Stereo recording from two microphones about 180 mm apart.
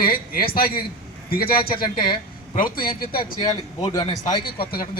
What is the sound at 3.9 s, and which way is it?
Speech, 25° left (ahead or behind).